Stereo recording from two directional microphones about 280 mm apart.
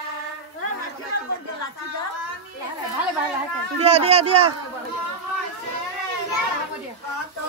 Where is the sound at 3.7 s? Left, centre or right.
Right.